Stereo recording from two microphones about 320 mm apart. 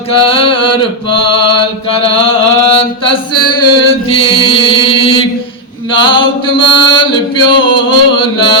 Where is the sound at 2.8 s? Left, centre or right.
Centre.